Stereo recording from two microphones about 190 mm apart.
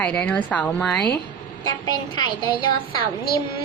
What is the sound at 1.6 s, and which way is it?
A child's voice, 20° left (ahead or behind).